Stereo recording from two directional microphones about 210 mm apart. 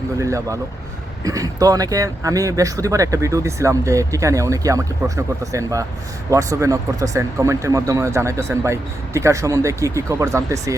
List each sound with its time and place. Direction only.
0.2 s speech: 15° right (ahead or behind)